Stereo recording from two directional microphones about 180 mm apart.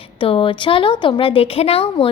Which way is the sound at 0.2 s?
30° left (ahead or behind).